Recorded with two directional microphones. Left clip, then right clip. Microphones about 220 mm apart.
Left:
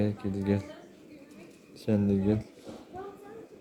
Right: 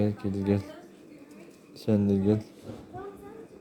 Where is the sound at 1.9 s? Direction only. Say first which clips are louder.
Right 2 dB; 10° right (ahead or behind).